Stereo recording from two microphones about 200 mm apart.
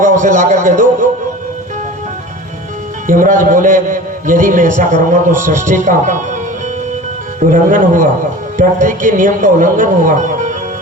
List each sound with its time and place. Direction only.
0.0 s a sound: 40° right (ahead or behind)
3.1 s a man's voice: 40° right (ahead or behind)
7.3 s a man's voice: 40° right (ahead or behind)